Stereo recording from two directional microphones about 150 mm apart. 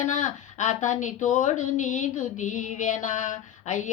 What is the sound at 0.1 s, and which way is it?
A woman's voice, 55° left (ahead or behind).